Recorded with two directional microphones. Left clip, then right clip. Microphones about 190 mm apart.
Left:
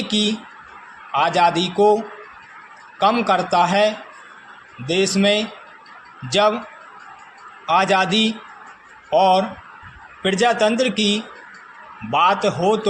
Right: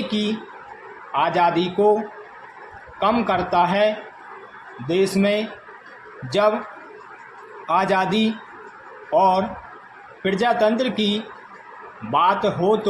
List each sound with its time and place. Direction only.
0.1 s a man's voice: 35° left (ahead or behind)
3.0 s a man's voice: 40° left (ahead or behind)
7.7 s a man's voice: 35° left (ahead or behind)